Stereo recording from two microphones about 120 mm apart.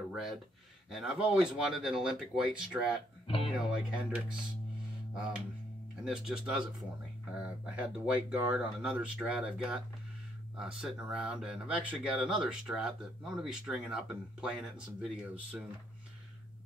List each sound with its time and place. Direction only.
0.1 s speech: 5° right (ahead or behind)
3.3 s speech: 50° left (ahead or behind)
3.5 s speech: 5° right (ahead or behind)